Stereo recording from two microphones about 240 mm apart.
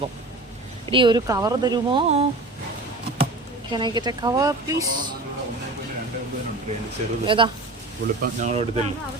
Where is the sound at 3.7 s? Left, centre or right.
Centre.